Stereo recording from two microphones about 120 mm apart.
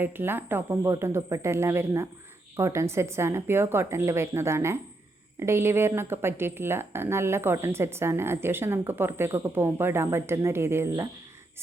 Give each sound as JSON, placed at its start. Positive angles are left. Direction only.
{"t": 0.0, "sound": "a woman's voice", "side_deg": -20}